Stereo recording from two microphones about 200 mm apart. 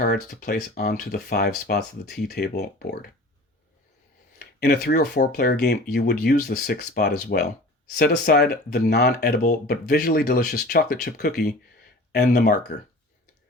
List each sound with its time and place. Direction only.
0.0 s speech: 45° left (ahead or behind)
4.4 s speech: 50° left (ahead or behind)